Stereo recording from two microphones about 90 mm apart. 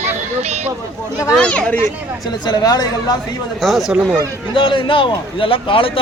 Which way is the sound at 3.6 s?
Centre (ahead or behind).